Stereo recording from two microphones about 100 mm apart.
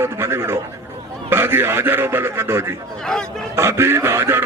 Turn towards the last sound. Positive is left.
turn(degrees=-25)  # may be behind; listen again after turning